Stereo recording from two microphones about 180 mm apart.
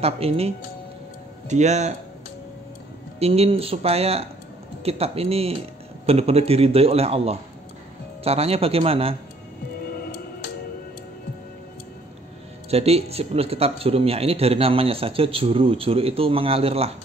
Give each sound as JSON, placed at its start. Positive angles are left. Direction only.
{"t": 0.0, "sound": "speech", "side_deg": -35}
{"t": 1.5, "sound": "speech", "side_deg": -40}
{"t": 3.2, "sound": "speech", "side_deg": -35}
{"t": 12.6, "sound": "speech", "side_deg": -35}